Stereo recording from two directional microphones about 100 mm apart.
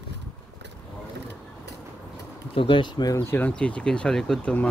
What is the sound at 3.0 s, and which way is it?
Speech, 35° left (ahead or behind).